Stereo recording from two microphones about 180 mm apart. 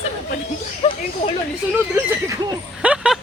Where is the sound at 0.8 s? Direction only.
35° left (ahead or behind).